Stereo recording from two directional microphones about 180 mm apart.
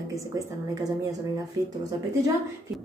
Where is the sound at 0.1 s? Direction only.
20° right (ahead or behind).